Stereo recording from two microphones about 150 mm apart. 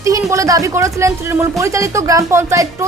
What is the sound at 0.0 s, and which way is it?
A woman's voice, 20° right (ahead or behind).